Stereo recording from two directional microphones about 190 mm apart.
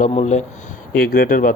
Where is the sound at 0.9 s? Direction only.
50° left (ahead or behind).